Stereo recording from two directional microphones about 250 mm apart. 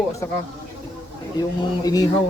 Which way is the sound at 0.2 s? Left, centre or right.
Centre.